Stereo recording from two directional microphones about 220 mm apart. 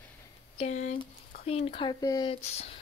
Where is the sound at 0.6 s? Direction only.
30° left (ahead or behind).